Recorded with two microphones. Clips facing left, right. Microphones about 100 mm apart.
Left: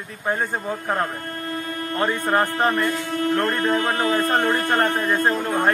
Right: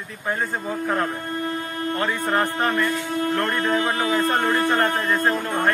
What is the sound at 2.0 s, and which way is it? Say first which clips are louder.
Speech: left 3 dB; 35° left (ahead or behind).